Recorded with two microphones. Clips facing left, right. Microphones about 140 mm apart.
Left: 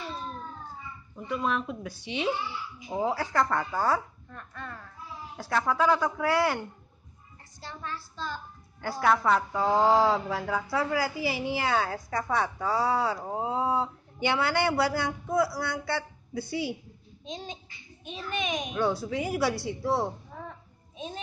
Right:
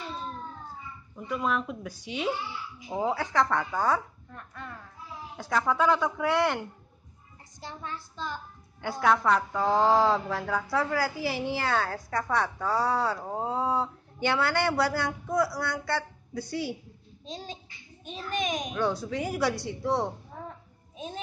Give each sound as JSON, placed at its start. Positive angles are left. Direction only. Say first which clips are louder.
{"t": 1.1, "sound": "speech", "louder": "even", "side_deg": 0}
{"t": 4.3, "sound": "a sound", "louder": "left 2 dB", "side_deg": -15}
{"t": 5.4, "sound": "speech", "louder": "even", "side_deg": 0}
{"t": 7.6, "sound": "a woman's voice", "louder": "even", "side_deg": -20}
{"t": 9.0, "sound": "a woman's voice", "louder": "even", "side_deg": 5}
{"t": 17.2, "sound": "a child's voice", "louder": "left 1 dB", "side_deg": -35}
{"t": 18.7, "sound": "a woman's voice", "louder": "left 1 dB", "side_deg": 10}